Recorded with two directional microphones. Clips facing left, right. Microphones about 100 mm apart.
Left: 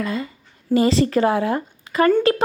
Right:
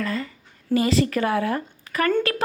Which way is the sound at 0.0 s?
20° left (ahead or behind).